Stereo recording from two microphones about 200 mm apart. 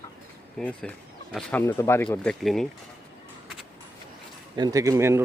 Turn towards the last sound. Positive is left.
turn(degrees=-10)  # may be behind; listen again after turning